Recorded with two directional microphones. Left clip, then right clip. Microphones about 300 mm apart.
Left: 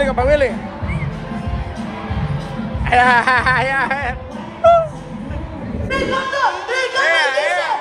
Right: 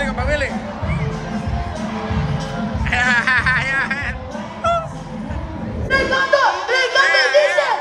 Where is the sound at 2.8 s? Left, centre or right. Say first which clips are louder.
Left 4 dB; centre.